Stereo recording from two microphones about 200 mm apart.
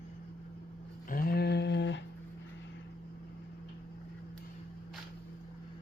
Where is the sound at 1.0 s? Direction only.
45° left (ahead or behind); by 2.0 s 60° left (ahead or behind).